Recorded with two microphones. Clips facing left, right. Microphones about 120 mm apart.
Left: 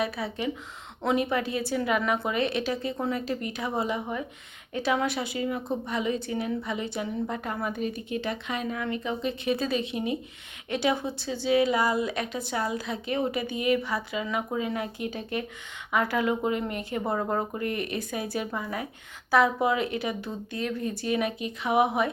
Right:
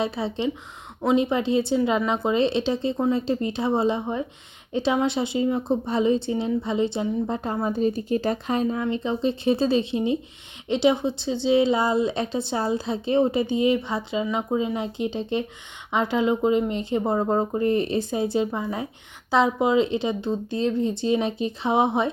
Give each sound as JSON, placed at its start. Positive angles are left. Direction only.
{"t": 0.0, "sound": "a woman's voice", "side_deg": -25}